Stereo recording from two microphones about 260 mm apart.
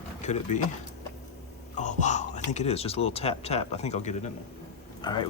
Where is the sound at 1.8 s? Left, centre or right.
Left.